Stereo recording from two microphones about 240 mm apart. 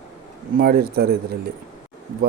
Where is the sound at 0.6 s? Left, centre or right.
Right.